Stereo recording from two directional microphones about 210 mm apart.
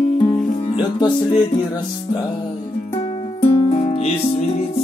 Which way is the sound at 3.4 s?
25° left (ahead or behind).